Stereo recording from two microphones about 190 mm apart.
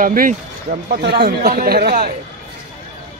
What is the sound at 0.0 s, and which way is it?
Speech, 45° right (ahead or behind).